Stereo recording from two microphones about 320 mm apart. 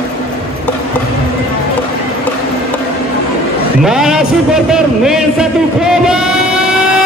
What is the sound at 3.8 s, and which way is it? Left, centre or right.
A man's voice, centre.